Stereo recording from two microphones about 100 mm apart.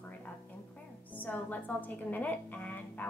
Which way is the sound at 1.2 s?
15° left (ahead or behind).